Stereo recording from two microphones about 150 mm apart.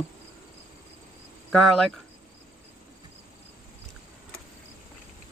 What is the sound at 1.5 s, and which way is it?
Speech, 5° left (ahead or behind).